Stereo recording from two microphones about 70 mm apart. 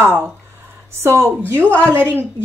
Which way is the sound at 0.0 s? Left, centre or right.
Right.